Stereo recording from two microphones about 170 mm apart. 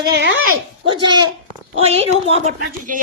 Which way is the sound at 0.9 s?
30° right (ahead or behind).